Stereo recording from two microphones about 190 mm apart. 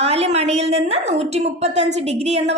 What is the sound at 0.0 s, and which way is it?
A woman's voice, 35° right (ahead or behind).